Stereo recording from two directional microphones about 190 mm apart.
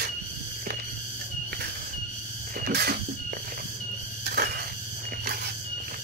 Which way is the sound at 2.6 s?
55° right (ahead or behind).